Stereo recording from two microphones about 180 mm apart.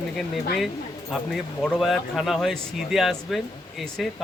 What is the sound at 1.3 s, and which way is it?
A man's voice, centre (ahead or behind).